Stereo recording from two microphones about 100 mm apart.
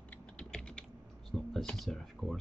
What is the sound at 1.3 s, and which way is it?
Speech, 5° left (ahead or behind).